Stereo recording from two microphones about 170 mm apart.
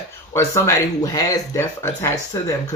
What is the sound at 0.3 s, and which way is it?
Speech, 15° left (ahead or behind).